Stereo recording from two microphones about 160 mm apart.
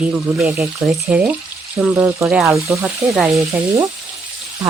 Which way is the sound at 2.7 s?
20° right (ahead or behind).